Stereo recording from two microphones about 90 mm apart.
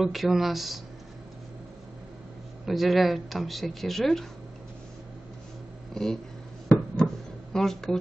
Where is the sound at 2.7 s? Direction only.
Centre (ahead or behind).